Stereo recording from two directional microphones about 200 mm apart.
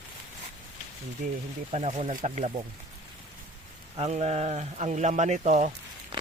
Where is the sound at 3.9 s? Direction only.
35° right (ahead or behind).